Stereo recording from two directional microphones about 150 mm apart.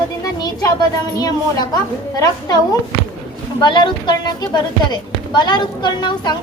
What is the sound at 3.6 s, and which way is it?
A woman's voice, 30° left (ahead or behind).